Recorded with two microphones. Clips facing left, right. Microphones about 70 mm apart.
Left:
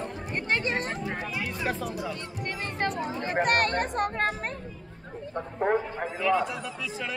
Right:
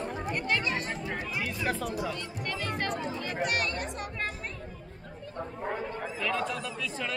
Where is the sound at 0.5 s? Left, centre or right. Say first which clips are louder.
Left 4 dB; left.